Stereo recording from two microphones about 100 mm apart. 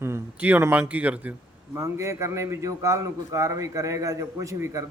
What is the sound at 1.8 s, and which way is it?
A man's voice, 30° right (ahead or behind).